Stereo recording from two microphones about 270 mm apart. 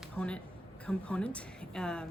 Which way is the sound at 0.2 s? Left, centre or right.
Centre.